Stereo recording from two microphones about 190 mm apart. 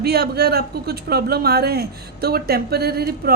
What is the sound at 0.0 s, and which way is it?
A woman's voice, 55° right (ahead or behind).